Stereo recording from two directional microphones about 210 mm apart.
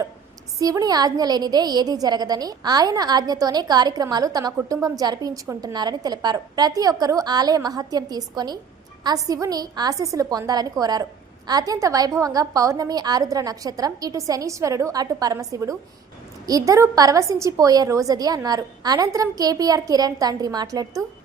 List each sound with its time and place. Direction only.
0.6 s a woman's voice: 15° right (ahead or behind)